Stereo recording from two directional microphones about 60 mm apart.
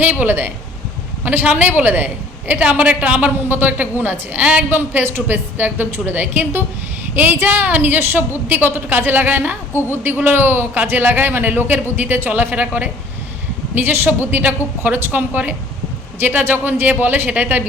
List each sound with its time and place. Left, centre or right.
0.0 s a woman's voice: right